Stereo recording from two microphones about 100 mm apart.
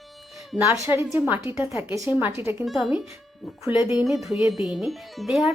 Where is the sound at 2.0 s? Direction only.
20° right (ahead or behind).